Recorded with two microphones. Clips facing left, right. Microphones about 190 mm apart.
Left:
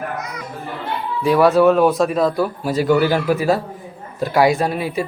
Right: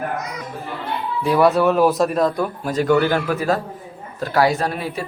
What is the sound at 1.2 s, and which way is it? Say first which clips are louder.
A man's voice: left 3 dB; centre (ahead or behind).